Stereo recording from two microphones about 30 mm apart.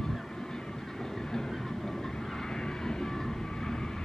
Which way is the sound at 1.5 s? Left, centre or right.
Centre.